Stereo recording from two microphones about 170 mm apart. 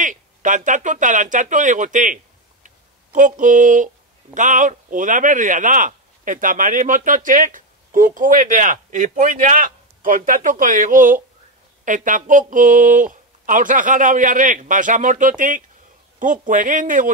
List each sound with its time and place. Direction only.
0.0 s speech: 50° right (ahead or behind)